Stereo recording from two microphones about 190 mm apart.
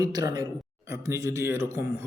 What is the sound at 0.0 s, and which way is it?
A man's voice, 20° right (ahead or behind).